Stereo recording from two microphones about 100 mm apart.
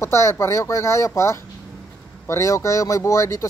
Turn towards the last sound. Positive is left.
turn(degrees=30)  # may be behind; listen again after turning